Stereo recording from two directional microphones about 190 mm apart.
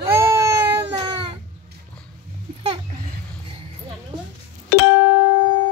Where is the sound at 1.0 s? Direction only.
25° right (ahead or behind).